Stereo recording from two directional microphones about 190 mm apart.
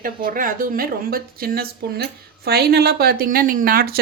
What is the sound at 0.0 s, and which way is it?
A woman's voice, 50° right (ahead or behind).